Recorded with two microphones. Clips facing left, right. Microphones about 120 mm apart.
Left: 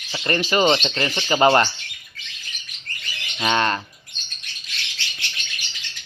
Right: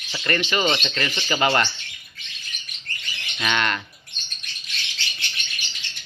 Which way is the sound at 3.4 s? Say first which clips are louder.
Left 4 dB; 35° left (ahead or behind).